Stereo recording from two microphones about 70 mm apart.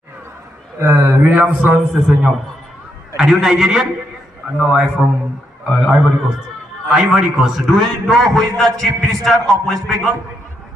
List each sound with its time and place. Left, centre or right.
0.8 s a man's voice: right; by 2.0 s centre
2.0 s a man's voice: centre